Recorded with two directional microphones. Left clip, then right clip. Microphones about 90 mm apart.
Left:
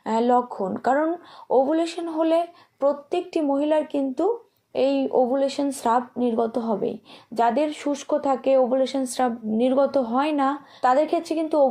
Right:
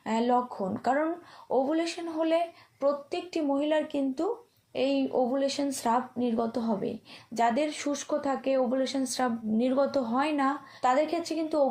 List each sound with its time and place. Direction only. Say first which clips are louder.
0.0 s speech: left 6 dB; 45° left (ahead or behind)